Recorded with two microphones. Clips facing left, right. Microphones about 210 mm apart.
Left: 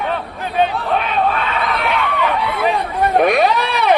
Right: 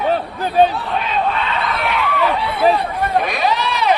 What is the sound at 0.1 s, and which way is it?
Chatter, 35° right (ahead or behind).